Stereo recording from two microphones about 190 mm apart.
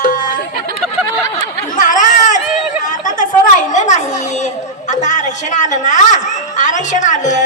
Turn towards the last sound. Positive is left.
turn(degrees=40)  # may be behind; listen again after turning